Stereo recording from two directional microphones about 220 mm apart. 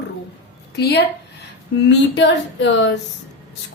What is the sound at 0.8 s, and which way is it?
A woman's voice, 45° left (ahead or behind).